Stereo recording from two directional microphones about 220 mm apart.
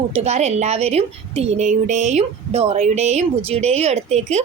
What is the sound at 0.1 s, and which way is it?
A woman's voice, 30° right (ahead or behind).